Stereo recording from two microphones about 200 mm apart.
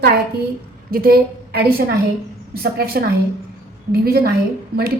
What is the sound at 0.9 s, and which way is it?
A woman's voice, 45° right (ahead or behind).